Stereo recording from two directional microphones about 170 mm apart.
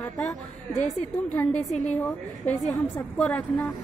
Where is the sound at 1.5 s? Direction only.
40° left (ahead or behind).